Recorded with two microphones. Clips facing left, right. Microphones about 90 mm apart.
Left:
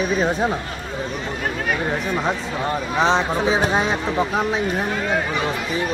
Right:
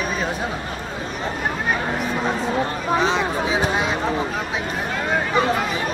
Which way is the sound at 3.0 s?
30° left (ahead or behind).